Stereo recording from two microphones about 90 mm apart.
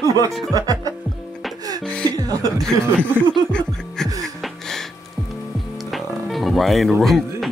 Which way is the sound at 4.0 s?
5° left (ahead or behind).